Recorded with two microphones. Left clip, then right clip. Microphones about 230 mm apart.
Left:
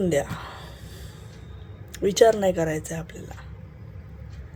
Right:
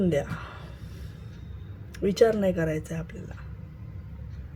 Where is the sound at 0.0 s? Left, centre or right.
Centre.